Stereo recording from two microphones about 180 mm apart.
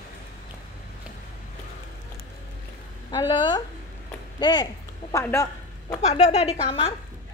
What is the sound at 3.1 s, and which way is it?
A woman's voice, 25° left (ahead or behind).